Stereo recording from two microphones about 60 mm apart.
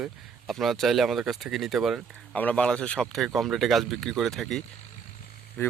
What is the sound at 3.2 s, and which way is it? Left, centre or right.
Speech, centre.